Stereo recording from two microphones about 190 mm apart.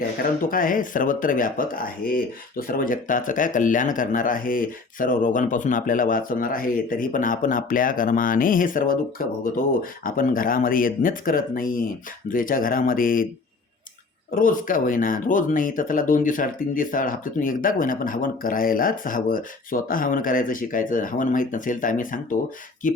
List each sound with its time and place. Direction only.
0.2 s speech: 45° left (ahead or behind)
14.3 s speech: 45° left (ahead or behind)